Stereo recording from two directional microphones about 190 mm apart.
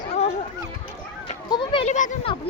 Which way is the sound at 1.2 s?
25° left (ahead or behind).